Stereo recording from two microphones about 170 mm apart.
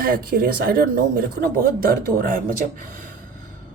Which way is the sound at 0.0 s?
60° right (ahead or behind).